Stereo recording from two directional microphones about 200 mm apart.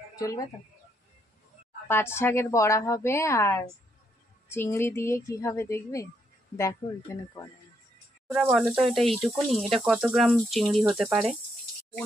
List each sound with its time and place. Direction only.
0.1 s chicken: 15° left (ahead or behind)
1.9 s a woman's voice: 10° left (ahead or behind)
8.4 s speech: centre (ahead or behind)